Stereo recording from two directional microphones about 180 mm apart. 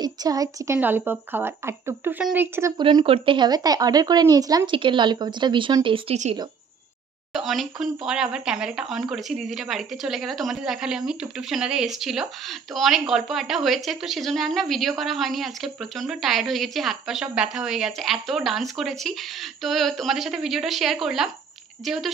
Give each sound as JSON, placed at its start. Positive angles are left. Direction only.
{"t": 0.0, "sound": "speech", "side_deg": -20}
{"t": 2.8, "sound": "a woman's voice", "side_deg": -25}
{"t": 7.3, "sound": "speech", "side_deg": 0}